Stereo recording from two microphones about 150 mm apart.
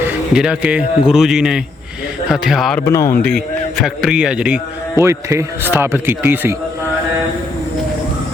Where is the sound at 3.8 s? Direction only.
5° right (ahead or behind).